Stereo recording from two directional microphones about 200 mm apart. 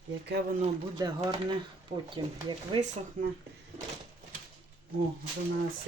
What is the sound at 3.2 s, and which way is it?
Speech, 45° right (ahead or behind).